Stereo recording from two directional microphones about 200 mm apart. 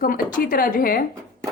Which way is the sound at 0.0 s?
45° left (ahead or behind).